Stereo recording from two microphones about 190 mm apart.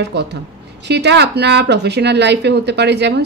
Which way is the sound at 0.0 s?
65° right (ahead or behind).